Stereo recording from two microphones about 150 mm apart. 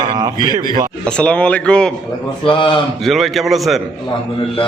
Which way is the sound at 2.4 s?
35° left (ahead or behind).